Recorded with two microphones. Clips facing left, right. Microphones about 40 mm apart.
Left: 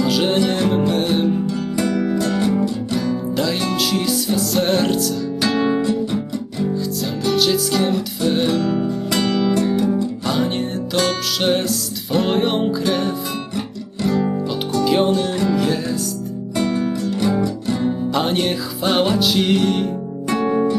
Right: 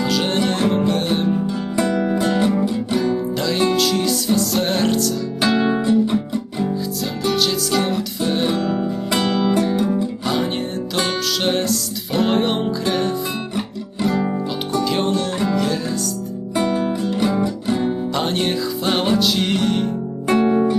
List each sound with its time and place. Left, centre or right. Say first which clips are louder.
0.0 s music: left 2 dB; centre
1.3 s music: even; centre
3.3 s music: right 2 dB; centre
5.4 s guitar: right 1 dB; centre
7.3 s music: left 2 dB; centre
8.4 s music: left 1 dB; right
10.2 s music: left 2 dB; centre
14.2 s music: left 1 dB; centre
14.8 s music: left 6 dB; centre
16.7 s music: right 1 dB; right
18.1 s music: left 1 dB; centre
20.2 s music: right 4 dB; right